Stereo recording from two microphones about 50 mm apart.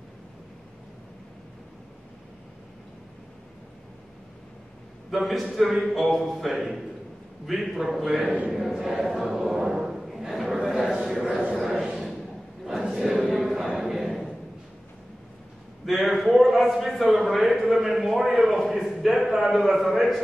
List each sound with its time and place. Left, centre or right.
5.1 s a man's voice: centre
8.1 s a man's voice: right
8.5 s a man's voice: centre
11.8 s a sound: centre
15.8 s a man's voice: centre
18.2 s a man's voice: centre
18.5 s a man's voice: centre